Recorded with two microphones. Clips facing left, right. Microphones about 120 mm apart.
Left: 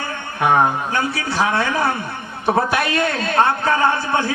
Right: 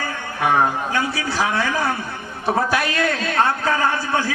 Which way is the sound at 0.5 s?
25° left (ahead or behind).